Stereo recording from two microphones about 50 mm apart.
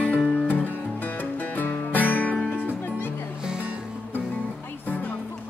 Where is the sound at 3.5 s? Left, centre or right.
Right.